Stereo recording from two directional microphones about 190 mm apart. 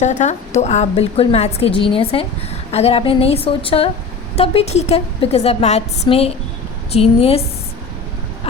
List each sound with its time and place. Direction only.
0.0 s a woman's voice: 40° left (ahead or behind)